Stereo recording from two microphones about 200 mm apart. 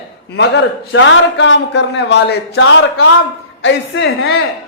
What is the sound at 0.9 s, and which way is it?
Speech, 65° left (ahead or behind).